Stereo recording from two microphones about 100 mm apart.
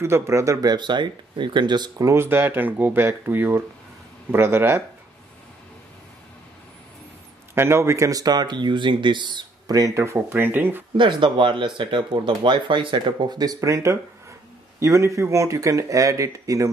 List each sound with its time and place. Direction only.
0.0 s speech: 30° right (ahead or behind); by 2.0 s 45° right (ahead or behind)
2.0 s speech: 25° right (ahead or behind)
7.5 s speech: 25° right (ahead or behind)
11.0 s speech: 50° right (ahead or behind); by 16.6 s 35° right (ahead or behind)